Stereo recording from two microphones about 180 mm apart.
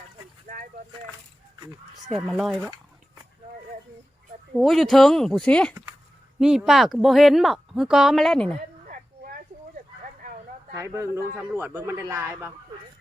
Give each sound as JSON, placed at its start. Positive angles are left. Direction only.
{"t": 0.4, "sound": "a sound", "side_deg": -50}
{"t": 2.0, "sound": "speech", "side_deg": 0}
{"t": 4.5, "sound": "speech", "side_deg": 0}
{"t": 10.8, "sound": "a man's voice", "side_deg": -15}